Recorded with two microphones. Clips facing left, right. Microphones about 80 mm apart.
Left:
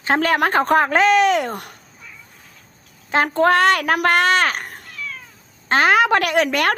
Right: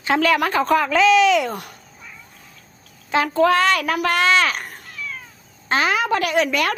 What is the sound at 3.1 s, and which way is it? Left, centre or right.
A woman's voice, left.